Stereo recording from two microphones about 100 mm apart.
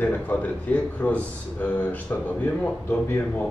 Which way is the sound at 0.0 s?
15° left (ahead or behind).